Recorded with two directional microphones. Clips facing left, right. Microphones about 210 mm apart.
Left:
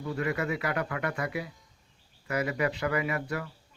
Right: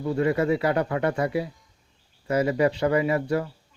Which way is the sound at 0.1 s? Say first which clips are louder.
Right 8 dB; 30° right (ahead or behind).